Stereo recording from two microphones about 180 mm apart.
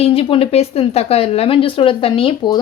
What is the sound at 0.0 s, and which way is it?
Speech, 30° left (ahead or behind).